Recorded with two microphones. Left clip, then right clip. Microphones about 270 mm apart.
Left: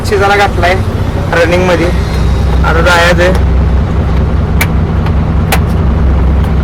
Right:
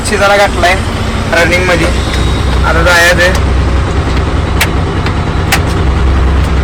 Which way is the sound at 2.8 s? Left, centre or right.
Centre.